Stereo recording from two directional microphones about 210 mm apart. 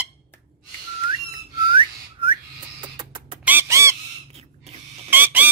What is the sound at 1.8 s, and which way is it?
Whistling, 25° right (ahead or behind).